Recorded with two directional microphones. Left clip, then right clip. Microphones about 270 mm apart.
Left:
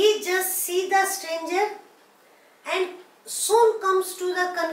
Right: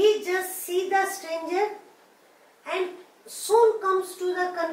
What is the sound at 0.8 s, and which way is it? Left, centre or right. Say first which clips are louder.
Child singing: left 3 dB; centre.